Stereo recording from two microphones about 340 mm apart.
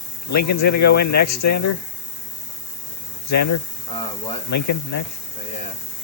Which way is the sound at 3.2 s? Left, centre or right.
Left.